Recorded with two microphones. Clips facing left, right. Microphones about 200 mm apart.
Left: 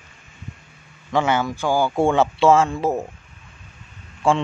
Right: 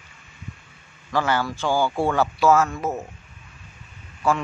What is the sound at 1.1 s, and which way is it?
Speech, 20° left (ahead or behind).